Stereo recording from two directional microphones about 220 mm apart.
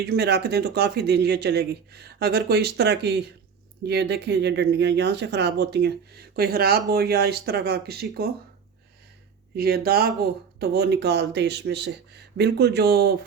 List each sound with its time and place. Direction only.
0.0 s speech: 45° right (ahead or behind)
9.6 s speech: 45° right (ahead or behind)